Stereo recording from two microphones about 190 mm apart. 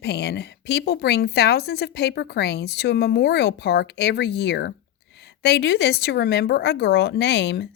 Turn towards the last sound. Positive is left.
turn(degrees=65)  # may be behind; listen again after turning